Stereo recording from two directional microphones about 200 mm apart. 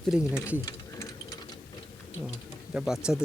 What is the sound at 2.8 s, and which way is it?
Speech, 5° right (ahead or behind).